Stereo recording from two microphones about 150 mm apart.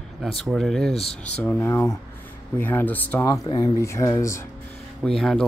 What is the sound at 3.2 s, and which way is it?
Speech, 25° left (ahead or behind).